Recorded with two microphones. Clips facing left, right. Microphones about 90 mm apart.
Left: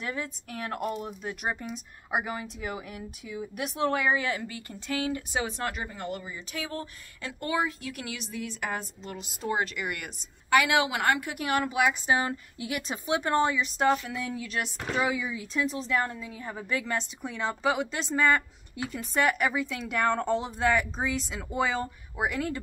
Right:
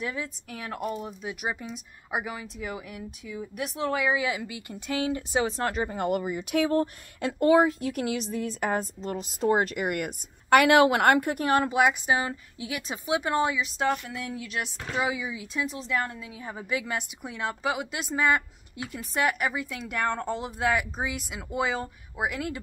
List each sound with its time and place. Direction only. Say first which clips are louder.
0.0 s speech: right 1 dB; centre (ahead or behind); by 5.9 s 35° right (ahead or behind)
5.9 s speech: right 9 dB; 60° right (ahead or behind); by 11.9 s 25° right (ahead or behind)
11.9 s a woman's voice: even; 5° right (ahead or behind)